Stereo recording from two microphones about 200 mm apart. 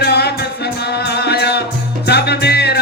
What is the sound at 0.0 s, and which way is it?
Music, 55° left (ahead or behind).